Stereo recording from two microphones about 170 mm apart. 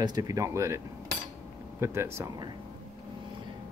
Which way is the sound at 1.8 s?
15° right (ahead or behind).